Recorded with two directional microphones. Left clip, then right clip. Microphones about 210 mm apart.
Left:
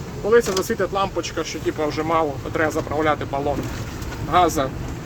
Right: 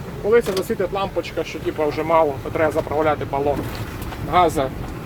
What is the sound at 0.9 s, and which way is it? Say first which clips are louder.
Speech: even; 5° left (ahead or behind).